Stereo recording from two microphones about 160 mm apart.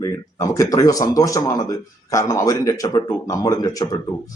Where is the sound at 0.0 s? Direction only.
20° left (ahead or behind).